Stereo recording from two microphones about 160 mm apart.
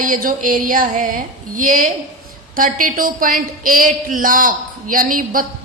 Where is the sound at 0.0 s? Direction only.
60° right (ahead or behind).